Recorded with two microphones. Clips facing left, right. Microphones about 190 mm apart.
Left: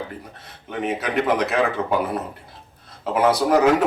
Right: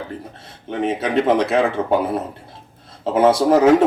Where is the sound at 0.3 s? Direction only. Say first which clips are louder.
Right 5 dB; 30° right (ahead or behind).